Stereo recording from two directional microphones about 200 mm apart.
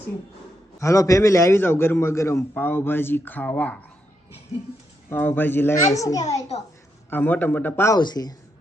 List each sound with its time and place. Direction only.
0.8 s a man's voice: 15° left (ahead or behind)
5.0 s a man's voice: 10° left (ahead or behind)
6.5 s a woman's voice: 30° left (ahead or behind)
7.1 s a man's voice: 10° left (ahead or behind)